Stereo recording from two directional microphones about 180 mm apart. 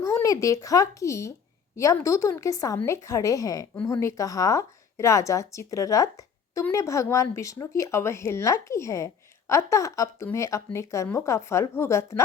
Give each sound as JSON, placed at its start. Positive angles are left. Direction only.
{"t": 0.0, "sound": "a woman's voice", "side_deg": 15}